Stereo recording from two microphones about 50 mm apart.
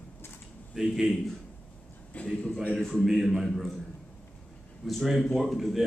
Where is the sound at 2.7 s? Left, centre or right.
Centre.